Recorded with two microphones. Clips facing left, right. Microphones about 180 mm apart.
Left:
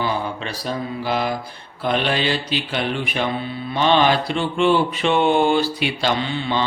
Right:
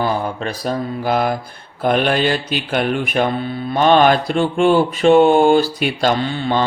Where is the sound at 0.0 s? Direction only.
45° right (ahead or behind).